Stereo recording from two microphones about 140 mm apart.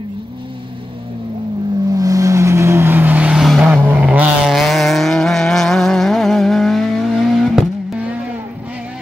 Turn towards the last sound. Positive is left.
turn(degrees=0)  # may be behind; listen again after turning